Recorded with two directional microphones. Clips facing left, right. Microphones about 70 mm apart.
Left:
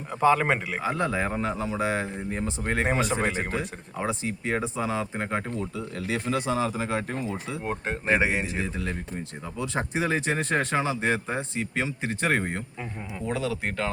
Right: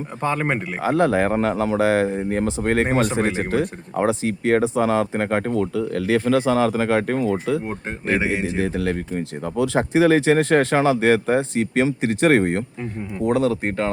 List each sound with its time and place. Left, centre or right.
0.3 s a man's voice: centre
0.8 s speech: right
3.5 s speech: right
7.6 s a man's voice: centre
8.0 s a man's voice: centre
8.6 s speech: right
13.7 s speech: right